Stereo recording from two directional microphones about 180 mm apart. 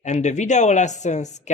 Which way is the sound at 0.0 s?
40° left (ahead or behind).